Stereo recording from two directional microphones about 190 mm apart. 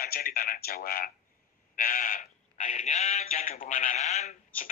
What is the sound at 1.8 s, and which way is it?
Sheep, 45° left (ahead or behind).